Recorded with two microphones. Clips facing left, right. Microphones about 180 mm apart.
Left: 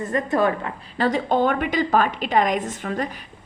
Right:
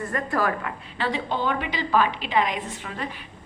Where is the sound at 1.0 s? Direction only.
45° left (ahead or behind).